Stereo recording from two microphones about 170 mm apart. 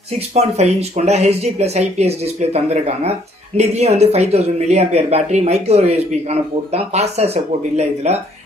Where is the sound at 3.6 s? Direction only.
40° right (ahead or behind).